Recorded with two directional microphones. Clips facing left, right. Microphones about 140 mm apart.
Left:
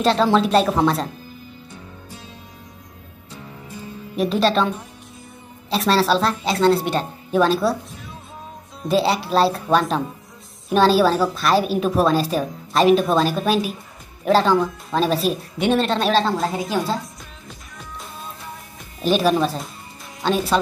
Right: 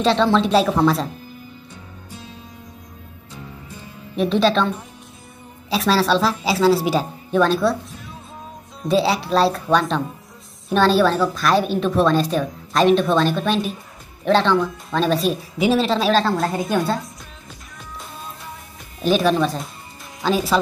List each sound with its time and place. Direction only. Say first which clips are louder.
0.0 s a woman's voice: even; 5° left (ahead or behind)
4.2 s a woman's voice: right 1 dB; centre (ahead or behind)
8.8 s a woman's voice: right 1 dB; centre (ahead or behind)
17.7 s music: even; centre (ahead or behind)